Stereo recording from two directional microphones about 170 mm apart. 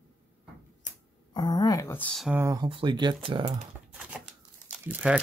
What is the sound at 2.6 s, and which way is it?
Speech, 30° right (ahead or behind).